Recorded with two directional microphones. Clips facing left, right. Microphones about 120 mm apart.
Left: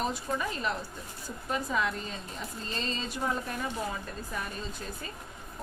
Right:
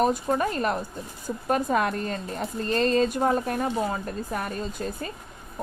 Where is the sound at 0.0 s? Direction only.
50° right (ahead or behind).